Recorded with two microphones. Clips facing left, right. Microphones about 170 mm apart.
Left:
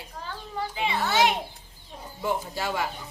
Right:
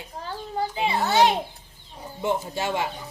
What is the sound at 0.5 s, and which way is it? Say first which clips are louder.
A child's voice: right 3 dB; 35° right (ahead or behind).